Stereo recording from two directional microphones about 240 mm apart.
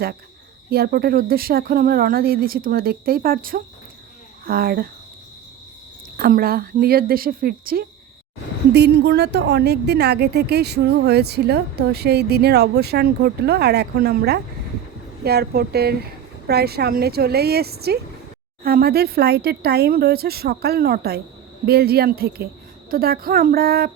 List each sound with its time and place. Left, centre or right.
0.7 s a woman's voice: right
6.1 s a woman's voice: right